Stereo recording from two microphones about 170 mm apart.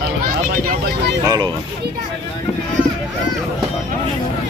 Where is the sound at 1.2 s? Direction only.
25° right (ahead or behind).